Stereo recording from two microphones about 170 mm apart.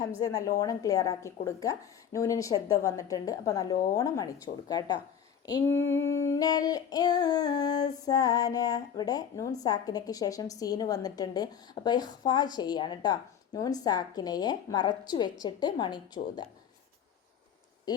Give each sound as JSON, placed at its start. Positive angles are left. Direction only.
{"t": 0.2, "sound": "a woman's voice", "side_deg": 20}
{"t": 16.2, "sound": "speech", "side_deg": 45}